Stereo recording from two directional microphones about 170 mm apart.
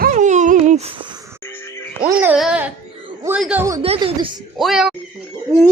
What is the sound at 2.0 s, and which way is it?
Speech, 10° right (ahead or behind).